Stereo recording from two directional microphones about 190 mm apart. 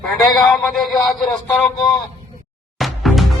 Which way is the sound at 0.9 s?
20° left (ahead or behind).